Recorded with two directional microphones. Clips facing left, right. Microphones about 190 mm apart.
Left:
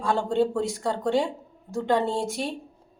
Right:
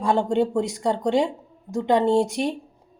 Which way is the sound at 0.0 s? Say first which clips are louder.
Right 3 dB; 20° right (ahead or behind).